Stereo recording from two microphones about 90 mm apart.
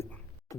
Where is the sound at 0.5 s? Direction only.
35° left (ahead or behind).